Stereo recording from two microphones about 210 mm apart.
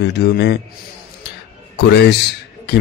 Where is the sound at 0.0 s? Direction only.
55° left (ahead or behind).